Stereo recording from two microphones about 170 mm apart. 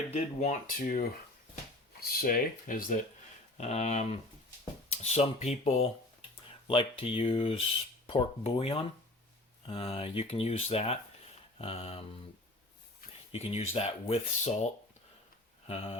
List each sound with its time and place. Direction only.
0.3 s speech: 50° left (ahead or behind)
3.6 s speech: 40° left (ahead or behind)
13.3 s speech: 35° left (ahead or behind)
15.6 s speech: 35° left (ahead or behind)